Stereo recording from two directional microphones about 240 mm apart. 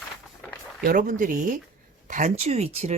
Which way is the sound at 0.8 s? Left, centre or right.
Right.